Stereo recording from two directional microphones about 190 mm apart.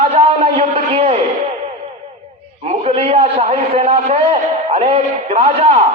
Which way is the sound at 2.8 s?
30° right (ahead or behind).